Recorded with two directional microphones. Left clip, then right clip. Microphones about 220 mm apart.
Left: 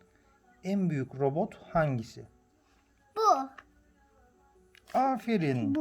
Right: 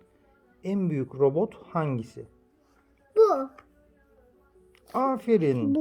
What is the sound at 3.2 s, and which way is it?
Music, 45° left (ahead or behind).